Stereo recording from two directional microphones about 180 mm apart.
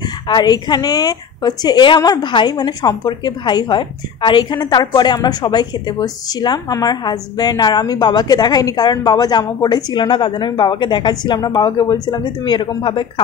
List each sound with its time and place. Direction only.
0.3 s a woman's voice: 25° left (ahead or behind)